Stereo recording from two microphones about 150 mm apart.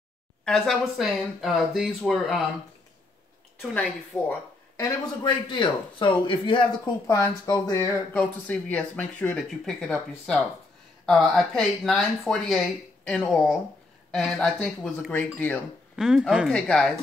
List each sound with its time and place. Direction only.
0.5 s speech: centre (ahead or behind)
4.1 s speech: 10° left (ahead or behind)
4.7 s speech: 25° left (ahead or behind)
7.1 s speech: 20° left (ahead or behind)
16.0 s speech: 5° right (ahead or behind)